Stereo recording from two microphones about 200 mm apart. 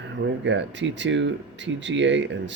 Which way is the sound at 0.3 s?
65° right (ahead or behind).